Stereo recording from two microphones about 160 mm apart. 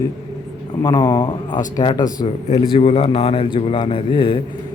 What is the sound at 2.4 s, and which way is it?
A man's voice, 35° left (ahead or behind).